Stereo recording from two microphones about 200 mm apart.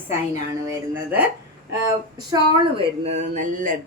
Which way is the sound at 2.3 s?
25° right (ahead or behind).